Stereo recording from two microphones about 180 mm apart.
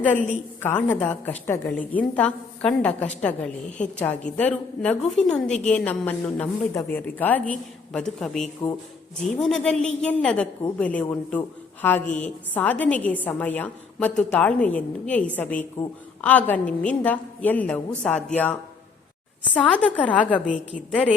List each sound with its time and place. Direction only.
0.6 s a woman's voice: 10° left (ahead or behind)
19.5 s a woman's voice: 5° left (ahead or behind)